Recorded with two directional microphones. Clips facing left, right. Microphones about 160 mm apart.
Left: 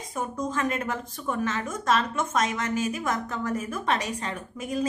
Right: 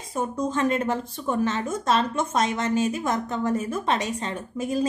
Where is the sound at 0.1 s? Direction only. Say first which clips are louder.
Right 4 dB; 30° right (ahead or behind).